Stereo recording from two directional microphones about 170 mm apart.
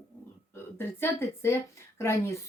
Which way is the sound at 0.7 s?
15° left (ahead or behind).